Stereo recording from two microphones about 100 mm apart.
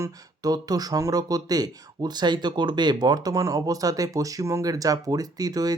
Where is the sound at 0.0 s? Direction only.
40° right (ahead or behind).